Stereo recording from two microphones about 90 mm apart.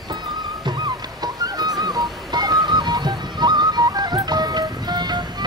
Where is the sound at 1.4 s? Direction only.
50° right (ahead or behind).